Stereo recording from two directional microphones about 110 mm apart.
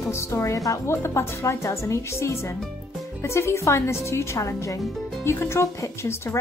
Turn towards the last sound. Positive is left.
turn(degrees=25)  # may be behind; listen again after turning